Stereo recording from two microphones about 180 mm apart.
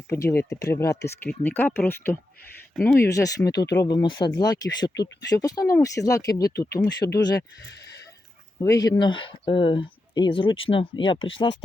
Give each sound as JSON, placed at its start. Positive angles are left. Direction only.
{"t": 0.1, "sound": "speech", "side_deg": 15}
{"t": 8.5, "sound": "speech", "side_deg": 20}